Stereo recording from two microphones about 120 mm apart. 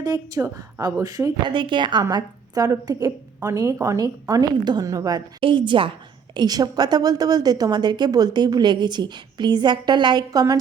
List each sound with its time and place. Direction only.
0.0 s a woman's voice: 30° right (ahead or behind)
5.4 s a woman's voice: 45° right (ahead or behind)